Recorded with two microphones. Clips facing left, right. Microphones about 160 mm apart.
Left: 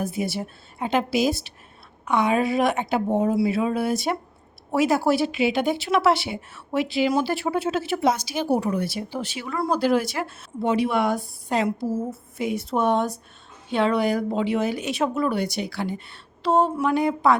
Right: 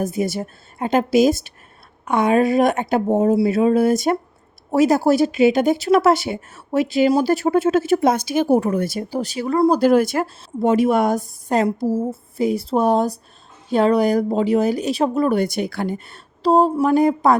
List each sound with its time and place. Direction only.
0.0 s speech: 45° right (ahead or behind)